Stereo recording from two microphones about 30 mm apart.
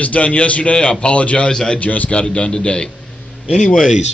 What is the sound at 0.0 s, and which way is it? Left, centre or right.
A man's voice, left.